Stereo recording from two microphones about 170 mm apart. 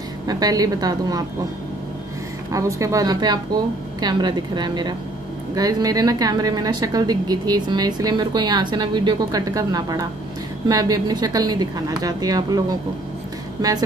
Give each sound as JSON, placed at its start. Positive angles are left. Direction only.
{"t": 0.3, "sound": "a woman's voice", "side_deg": -20}
{"t": 2.5, "sound": "a woman's voice", "side_deg": -20}